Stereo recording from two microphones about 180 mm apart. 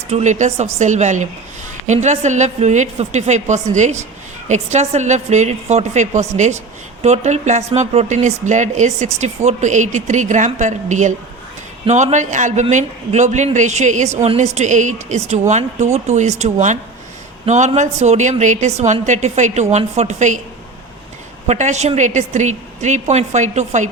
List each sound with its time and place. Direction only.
0.1 s speech: 40° right (ahead or behind)
21.4 s speech: 40° right (ahead or behind)